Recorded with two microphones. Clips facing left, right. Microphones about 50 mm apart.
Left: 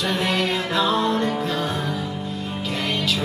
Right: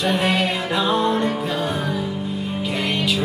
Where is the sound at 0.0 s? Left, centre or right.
Centre.